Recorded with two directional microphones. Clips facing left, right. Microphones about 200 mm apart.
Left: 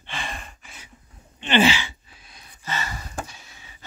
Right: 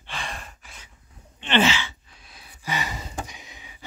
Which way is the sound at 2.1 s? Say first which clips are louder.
Even; centre (ahead or behind).